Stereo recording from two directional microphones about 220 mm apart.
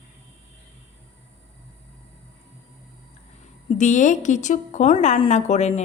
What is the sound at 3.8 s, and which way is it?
A woman's voice, 35° left (ahead or behind).